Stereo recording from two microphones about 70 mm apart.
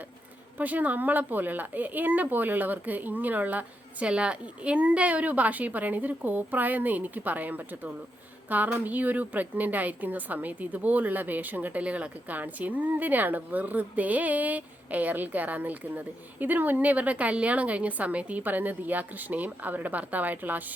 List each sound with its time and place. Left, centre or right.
0.6 s a woman's voice: right